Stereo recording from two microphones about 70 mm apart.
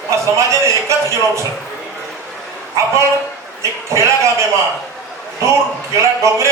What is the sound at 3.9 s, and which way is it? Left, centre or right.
Speech, right.